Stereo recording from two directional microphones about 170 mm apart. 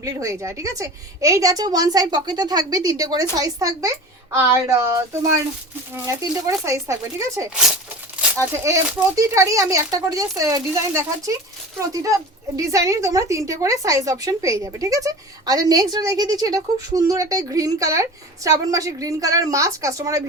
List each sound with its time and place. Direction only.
0.0 s a woman's voice: 20° right (ahead or behind)
6.1 s a woman's voice: 20° right (ahead or behind)